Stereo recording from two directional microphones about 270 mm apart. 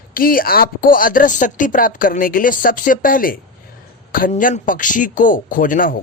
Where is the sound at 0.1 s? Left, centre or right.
Left.